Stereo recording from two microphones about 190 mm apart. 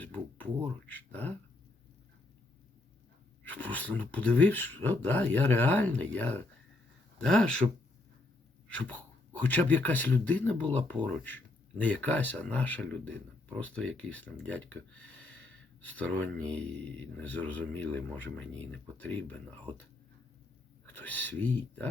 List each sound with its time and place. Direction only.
0.0 s speech: 10° left (ahead or behind)
3.4 s speech: 10° left (ahead or behind)
7.6 s speech: 30° right (ahead or behind)
8.8 s speech: 10° left (ahead or behind)
20.9 s speech: 10° left (ahead or behind)